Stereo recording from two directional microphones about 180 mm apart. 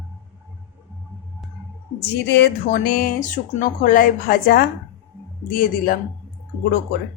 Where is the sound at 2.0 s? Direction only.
65° left (ahead or behind).